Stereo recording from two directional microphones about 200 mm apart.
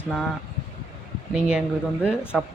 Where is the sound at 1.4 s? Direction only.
5° right (ahead or behind).